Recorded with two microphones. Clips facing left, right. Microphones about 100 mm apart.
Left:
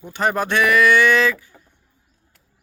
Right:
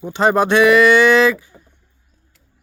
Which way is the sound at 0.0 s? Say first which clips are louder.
Right 6 dB; 20° right (ahead or behind).